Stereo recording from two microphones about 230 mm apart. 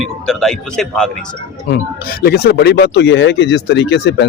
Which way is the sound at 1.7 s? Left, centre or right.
Left.